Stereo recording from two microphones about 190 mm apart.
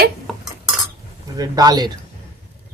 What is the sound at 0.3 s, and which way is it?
Cutlery, centre (ahead or behind).